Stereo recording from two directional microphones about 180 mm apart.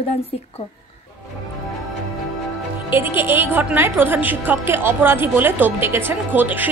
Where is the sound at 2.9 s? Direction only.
10° right (ahead or behind).